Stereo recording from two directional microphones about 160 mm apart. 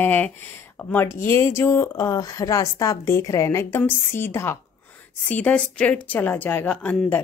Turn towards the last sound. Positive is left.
turn(degrees=10)  # may be behind; listen again after turning